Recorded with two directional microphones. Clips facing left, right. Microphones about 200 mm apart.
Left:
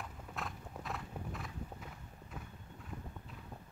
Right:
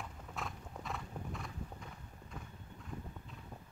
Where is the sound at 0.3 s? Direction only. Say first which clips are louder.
Even; centre (ahead or behind).